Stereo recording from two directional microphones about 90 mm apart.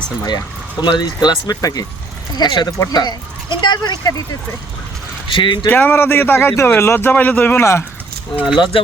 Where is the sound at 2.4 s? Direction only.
55° left (ahead or behind).